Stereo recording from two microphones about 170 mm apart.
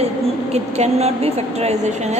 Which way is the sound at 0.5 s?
40° right (ahead or behind).